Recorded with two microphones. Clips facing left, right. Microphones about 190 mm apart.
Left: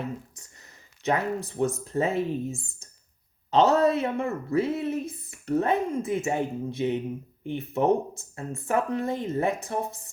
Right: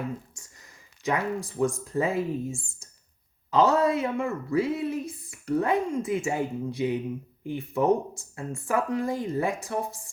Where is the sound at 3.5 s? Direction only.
25° left (ahead or behind).